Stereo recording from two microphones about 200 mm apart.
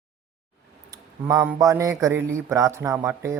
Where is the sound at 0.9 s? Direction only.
15° right (ahead or behind).